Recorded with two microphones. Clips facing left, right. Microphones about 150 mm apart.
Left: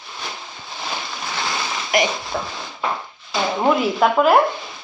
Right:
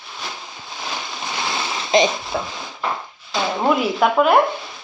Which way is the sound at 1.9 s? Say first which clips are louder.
Right 4 dB; 25° right (ahead or behind).